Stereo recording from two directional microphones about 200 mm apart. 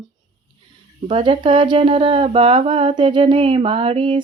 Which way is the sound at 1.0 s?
25° right (ahead or behind).